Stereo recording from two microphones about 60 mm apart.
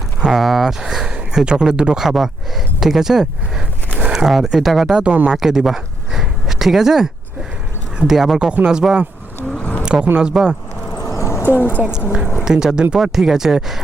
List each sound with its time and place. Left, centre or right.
0.3 s speech: centre
3.9 s a sound: centre
4.4 s speech: centre
5.0 s speech: centre
5.4 s a sound: centre
7.9 s speech: centre
9.6 s a sound: left
9.8 s a sound: centre
10.2 s speech: centre
10.9 s horse: left
11.4 s speech: left
12.4 s speech: centre